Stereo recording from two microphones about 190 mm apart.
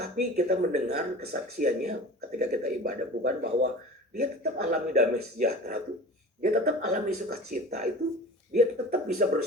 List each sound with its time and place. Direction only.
0.0 s a man's voice: 40° right (ahead or behind)